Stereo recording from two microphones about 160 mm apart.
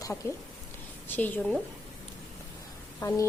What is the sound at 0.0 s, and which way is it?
Speech, 15° left (ahead or behind).